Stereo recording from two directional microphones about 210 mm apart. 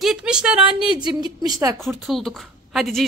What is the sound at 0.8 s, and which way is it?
A woman's voice, 20° right (ahead or behind).